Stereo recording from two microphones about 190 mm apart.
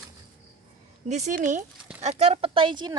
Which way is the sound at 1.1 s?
40° right (ahead or behind).